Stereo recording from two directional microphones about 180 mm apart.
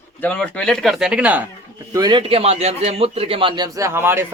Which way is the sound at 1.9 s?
25° right (ahead or behind).